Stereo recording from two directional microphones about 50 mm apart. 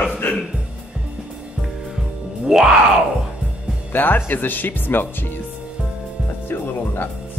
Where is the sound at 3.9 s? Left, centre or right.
Left.